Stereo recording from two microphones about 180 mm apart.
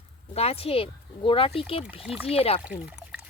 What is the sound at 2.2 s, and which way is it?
Speech, 35° left (ahead or behind).